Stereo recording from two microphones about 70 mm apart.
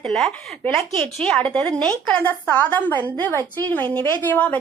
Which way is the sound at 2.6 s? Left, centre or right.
Left.